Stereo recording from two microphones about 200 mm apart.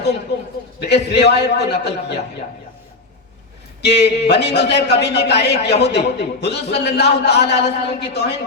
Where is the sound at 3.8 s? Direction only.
55° left (ahead or behind).